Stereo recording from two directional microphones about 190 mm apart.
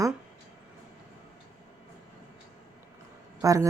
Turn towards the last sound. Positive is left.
turn(degrees=-15)  # may be behind; listen again after turning